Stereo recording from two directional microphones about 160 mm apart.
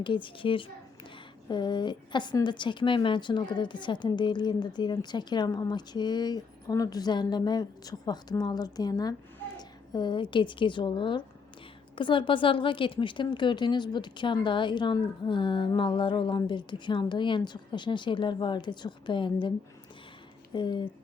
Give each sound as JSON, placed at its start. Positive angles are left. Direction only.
{"t": 0.0, "sound": "a child's voice", "side_deg": 30}